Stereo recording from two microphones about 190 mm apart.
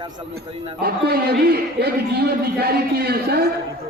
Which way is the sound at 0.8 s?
55° right (ahead or behind).